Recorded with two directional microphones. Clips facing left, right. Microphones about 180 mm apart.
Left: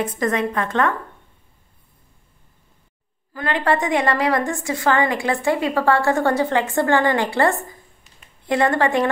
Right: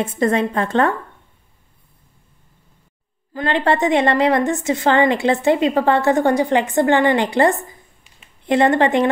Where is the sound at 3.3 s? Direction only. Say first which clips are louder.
Right 3 dB; 25° right (ahead or behind).